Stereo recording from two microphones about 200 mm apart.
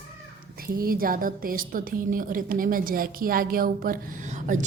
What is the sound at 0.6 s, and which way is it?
A woman's voice, 45° right (ahead or behind).